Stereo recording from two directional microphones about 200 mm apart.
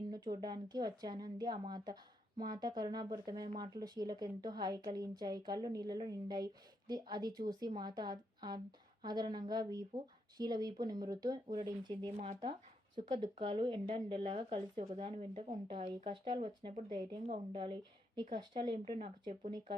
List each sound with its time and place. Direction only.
0.4 s a woman's voice: 20° right (ahead or behind)